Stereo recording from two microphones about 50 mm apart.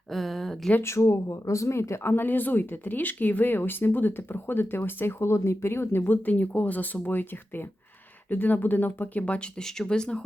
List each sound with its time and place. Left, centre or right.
0.1 s a sound: centre
0.8 s speech: left
2.0 s speech: left
6.1 s speech: left
9.6 s speech: centre